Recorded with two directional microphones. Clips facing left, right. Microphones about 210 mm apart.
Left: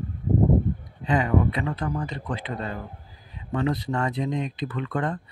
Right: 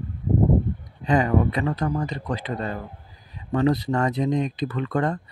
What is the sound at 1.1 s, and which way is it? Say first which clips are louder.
Speech: right 2 dB; 40° right (ahead or behind).